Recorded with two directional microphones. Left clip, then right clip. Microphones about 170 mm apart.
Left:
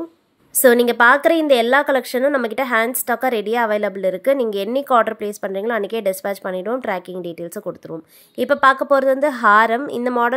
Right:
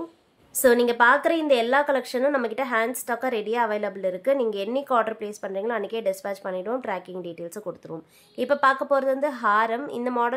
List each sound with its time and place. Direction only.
0.6 s a woman's voice: 35° left (ahead or behind)